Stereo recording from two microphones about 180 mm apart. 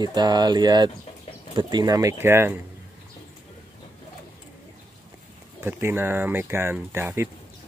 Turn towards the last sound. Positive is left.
turn(degrees=-15)  # may be behind; listen again after turning